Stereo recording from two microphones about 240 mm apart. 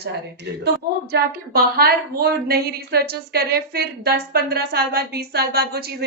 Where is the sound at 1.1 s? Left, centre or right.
Right.